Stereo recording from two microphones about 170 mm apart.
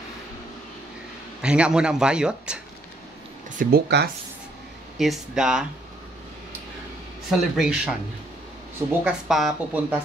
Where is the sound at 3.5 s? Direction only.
70° right (ahead or behind).